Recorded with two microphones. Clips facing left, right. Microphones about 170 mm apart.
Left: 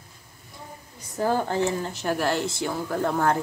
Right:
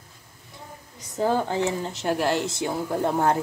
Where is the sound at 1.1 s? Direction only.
20° right (ahead or behind).